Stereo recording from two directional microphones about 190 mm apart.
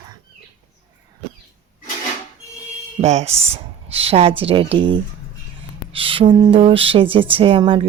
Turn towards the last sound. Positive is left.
turn(degrees=-25)  # may be behind; listen again after turning